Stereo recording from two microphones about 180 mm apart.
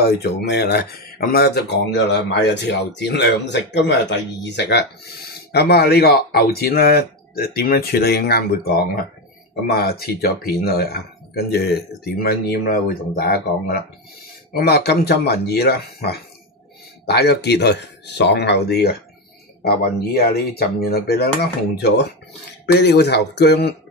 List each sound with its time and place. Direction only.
0.0 s speech: 60° left (ahead or behind)